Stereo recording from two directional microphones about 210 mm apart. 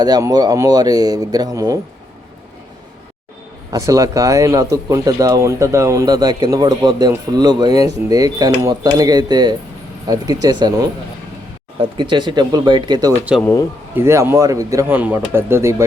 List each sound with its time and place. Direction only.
0.0 s speech: 20° right (ahead or behind)
3.7 s speech: 15° right (ahead or behind)
13.4 s speech: 15° left (ahead or behind)
13.9 s speech: 10° right (ahead or behind)